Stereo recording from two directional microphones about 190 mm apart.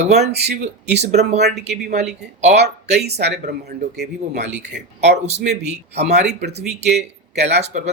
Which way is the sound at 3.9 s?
60° right (ahead or behind).